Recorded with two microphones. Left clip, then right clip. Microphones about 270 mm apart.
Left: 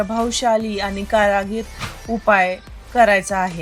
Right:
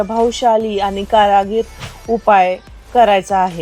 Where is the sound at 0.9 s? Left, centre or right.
Centre.